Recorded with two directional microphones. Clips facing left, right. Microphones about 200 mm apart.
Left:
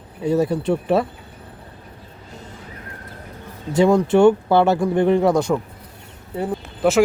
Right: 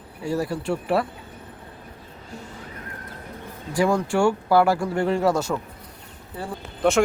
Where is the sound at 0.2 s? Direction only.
20° left (ahead or behind).